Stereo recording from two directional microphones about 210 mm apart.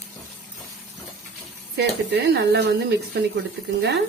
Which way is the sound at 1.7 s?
55° right (ahead or behind).